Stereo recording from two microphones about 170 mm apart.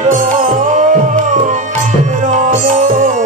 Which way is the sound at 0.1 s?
50° right (ahead or behind).